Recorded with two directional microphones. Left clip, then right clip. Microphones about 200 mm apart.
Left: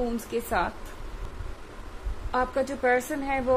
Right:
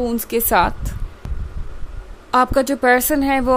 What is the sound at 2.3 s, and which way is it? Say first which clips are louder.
A woman's voice: right 11 dB; 55° right (ahead or behind).